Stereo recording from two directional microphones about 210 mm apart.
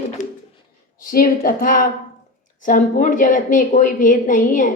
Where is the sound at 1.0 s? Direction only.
40° left (ahead or behind).